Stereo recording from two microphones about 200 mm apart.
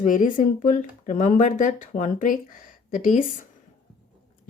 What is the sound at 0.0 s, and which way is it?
Speech, 40° left (ahead or behind).